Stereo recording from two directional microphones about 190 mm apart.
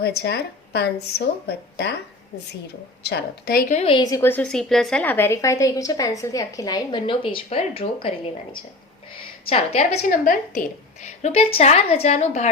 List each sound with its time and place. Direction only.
0.0 s speech: 55° left (ahead or behind)
3.0 s speech: 60° left (ahead or behind)
3.8 s a woman's voice: 25° left (ahead or behind)